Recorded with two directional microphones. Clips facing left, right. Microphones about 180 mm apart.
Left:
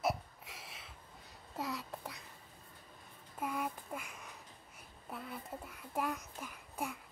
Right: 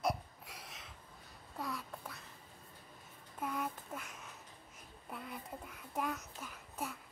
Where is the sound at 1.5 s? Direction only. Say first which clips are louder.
Left 2 dB; 20° left (ahead or behind).